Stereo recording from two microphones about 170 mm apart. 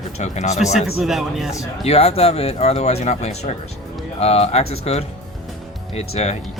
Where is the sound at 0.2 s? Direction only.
45° left (ahead or behind).